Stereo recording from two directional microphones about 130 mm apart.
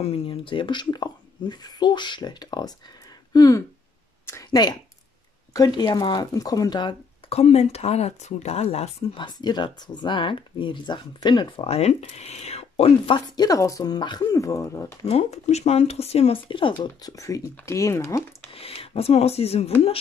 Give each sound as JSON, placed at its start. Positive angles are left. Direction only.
{"t": 0.0, "sound": "a woman's voice", "side_deg": 45}
{"t": 7.2, "sound": "speech", "side_deg": 50}
{"t": 9.2, "sound": "a woman's voice", "side_deg": 35}
{"t": 11.6, "sound": "speech", "side_deg": 55}
{"t": 13.4, "sound": "speech", "side_deg": 25}
{"t": 15.0, "sound": "speech", "side_deg": 55}
{"t": 16.8, "sound": "speech", "side_deg": 30}
{"t": 18.5, "sound": "speech", "side_deg": 45}